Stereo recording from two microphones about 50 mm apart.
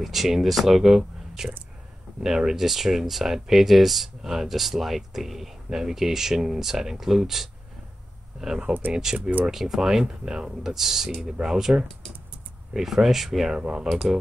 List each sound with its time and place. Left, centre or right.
0.0 s speech: centre
13.6 s speech: centre